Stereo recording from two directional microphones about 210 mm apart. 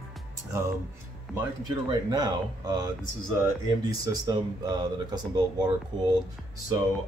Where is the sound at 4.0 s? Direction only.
20° right (ahead or behind).